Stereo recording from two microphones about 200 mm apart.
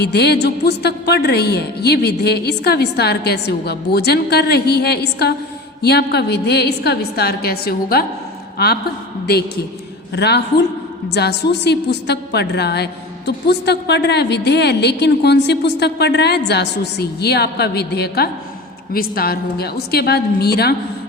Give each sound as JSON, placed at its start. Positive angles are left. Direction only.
{"t": 0.0, "sound": "a woman's voice", "side_deg": 55}
{"t": 10.2, "sound": "a woman's voice", "side_deg": 55}